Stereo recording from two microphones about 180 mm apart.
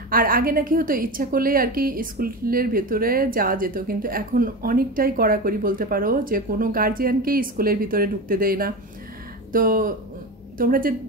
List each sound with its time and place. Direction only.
0.1 s a woman's voice: 55° right (ahead or behind)